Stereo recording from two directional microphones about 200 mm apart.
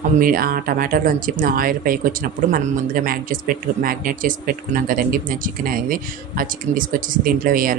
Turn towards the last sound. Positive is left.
turn(degrees=-45)  # may be behind; listen again after turning